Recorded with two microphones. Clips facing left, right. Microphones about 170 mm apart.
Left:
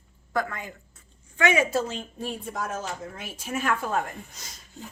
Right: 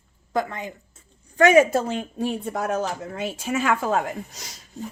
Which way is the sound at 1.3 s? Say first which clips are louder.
Right 7 dB; 40° right (ahead or behind).